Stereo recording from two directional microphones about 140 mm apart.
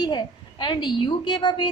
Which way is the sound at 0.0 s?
30° left (ahead or behind).